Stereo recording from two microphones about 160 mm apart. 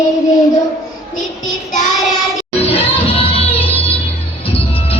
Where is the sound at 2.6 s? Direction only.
35° left (ahead or behind).